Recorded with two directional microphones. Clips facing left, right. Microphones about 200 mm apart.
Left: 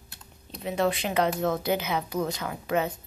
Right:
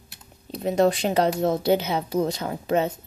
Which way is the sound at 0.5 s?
40° right (ahead or behind).